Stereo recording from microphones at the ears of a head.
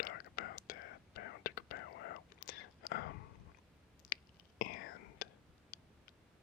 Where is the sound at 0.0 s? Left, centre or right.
Left.